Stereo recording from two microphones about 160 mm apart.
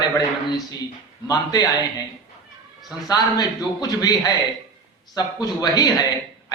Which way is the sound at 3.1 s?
25° left (ahead or behind).